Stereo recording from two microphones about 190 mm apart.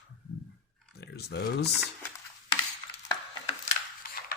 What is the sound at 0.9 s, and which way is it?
Speech, 60° left (ahead or behind).